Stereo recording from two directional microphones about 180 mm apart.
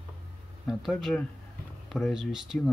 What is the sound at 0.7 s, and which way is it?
Speech, centre (ahead or behind).